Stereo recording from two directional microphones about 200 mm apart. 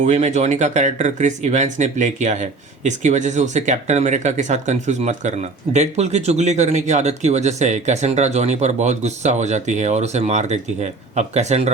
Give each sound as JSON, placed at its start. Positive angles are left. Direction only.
{"t": 0.0, "sound": "speech", "side_deg": -35}